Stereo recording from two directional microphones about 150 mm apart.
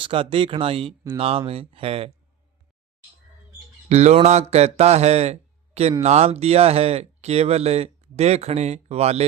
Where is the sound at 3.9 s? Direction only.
50° right (ahead or behind).